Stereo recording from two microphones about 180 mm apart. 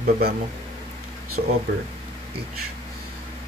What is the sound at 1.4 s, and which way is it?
Speech, 55° right (ahead or behind).